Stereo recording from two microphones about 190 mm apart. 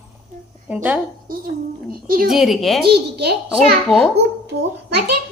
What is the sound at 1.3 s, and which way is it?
A woman's voice, 50° right (ahead or behind).